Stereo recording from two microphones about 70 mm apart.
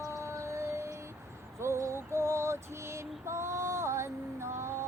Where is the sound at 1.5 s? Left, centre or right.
Right.